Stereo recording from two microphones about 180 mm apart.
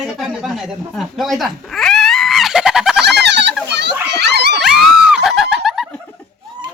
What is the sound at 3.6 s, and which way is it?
Children playing, 70° right (ahead or behind).